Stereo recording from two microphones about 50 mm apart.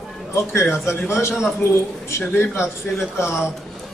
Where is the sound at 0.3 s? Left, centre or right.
Left.